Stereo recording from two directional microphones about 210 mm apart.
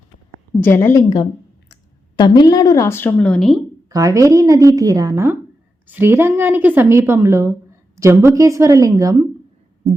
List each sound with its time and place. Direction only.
0.6 s a woman's voice: 10° left (ahead or behind)
3.8 s a woman's voice: 15° right (ahead or behind)